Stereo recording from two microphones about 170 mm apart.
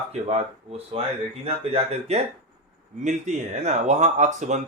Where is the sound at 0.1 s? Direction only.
40° right (ahead or behind).